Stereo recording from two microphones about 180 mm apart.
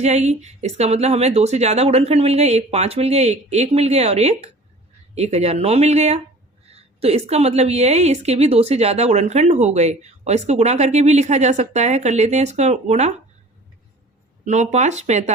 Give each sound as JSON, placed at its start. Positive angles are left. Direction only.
{"t": 0.0, "sound": "a woman's voice", "side_deg": -40}
{"t": 14.4, "sound": "a woman's voice", "side_deg": -40}